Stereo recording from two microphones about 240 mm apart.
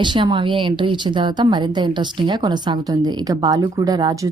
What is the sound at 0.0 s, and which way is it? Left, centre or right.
A woman's voice, centre.